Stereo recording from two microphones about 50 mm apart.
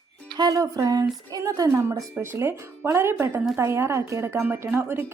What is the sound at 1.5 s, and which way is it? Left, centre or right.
Speech, right.